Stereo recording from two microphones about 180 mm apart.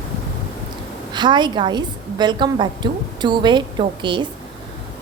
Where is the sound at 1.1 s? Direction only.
25° right (ahead or behind).